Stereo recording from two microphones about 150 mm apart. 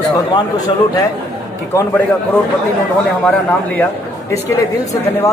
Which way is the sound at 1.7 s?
10° left (ahead or behind).